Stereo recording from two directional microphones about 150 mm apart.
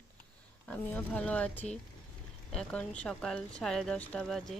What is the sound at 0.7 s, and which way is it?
A woman's voice, 10° left (ahead or behind).